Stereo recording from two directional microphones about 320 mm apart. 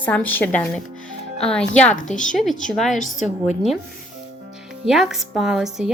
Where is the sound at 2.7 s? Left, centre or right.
Centre.